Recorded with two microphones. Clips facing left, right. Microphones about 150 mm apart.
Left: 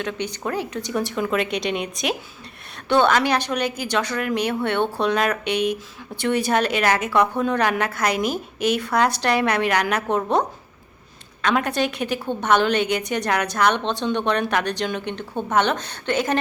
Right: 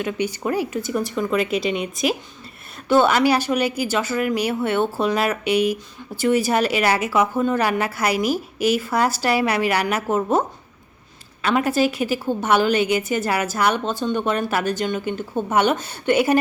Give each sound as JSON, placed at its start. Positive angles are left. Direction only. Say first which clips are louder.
{"t": 0.0, "sound": "a woman's voice", "louder": "right 3 dB", "side_deg": -10}
{"t": 11.4, "sound": "a woman's voice", "louder": "right 2 dB", "side_deg": -5}